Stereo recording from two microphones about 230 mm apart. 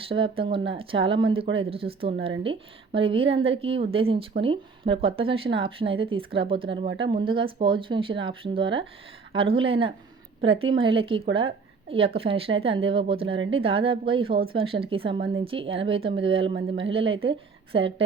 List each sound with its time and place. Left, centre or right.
0.1 s a woman's voice: right